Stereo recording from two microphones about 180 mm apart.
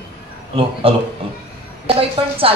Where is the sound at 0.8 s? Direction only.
30° right (ahead or behind).